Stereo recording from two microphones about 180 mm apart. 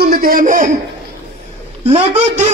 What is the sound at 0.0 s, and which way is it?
Speech, 55° right (ahead or behind).